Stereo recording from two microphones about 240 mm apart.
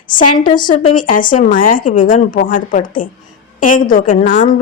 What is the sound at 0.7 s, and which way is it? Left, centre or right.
A woman's voice, left.